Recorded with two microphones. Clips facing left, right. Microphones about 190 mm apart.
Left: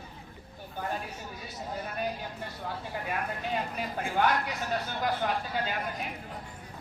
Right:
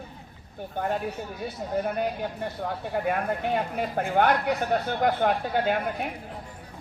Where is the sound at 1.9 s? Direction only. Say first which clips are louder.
Right 7 dB; 60° right (ahead or behind).